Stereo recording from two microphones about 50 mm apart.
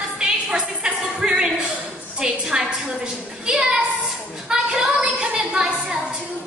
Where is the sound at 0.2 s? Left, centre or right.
Centre.